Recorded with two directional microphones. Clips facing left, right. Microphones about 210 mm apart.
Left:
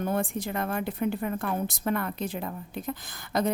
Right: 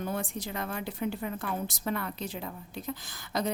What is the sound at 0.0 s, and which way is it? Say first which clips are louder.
A woman's voice: left 5 dB; 55° left (ahead or behind).